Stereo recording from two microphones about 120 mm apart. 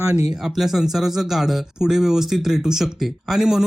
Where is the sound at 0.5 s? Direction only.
Centre (ahead or behind).